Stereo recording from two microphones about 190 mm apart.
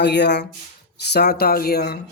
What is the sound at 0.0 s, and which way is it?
Speech, 60° left (ahead or behind).